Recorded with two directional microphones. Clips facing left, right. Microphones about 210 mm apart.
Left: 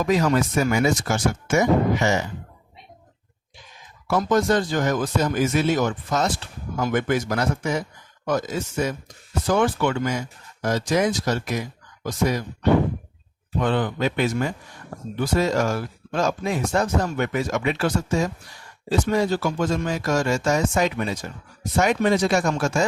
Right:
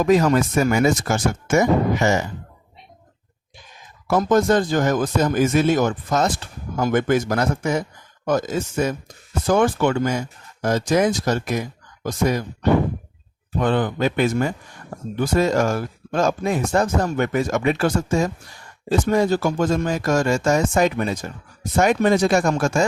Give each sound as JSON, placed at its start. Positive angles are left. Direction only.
{"t": 0.0, "sound": "speech", "side_deg": -45}
{"t": 4.0, "sound": "speech", "side_deg": -45}
{"t": 13.6, "sound": "speech", "side_deg": -45}